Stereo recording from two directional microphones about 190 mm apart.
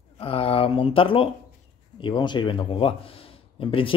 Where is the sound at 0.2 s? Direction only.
30° left (ahead or behind).